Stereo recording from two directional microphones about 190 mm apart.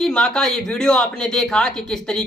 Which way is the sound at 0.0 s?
5° left (ahead or behind).